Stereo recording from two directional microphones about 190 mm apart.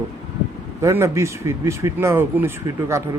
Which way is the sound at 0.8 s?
15° right (ahead or behind).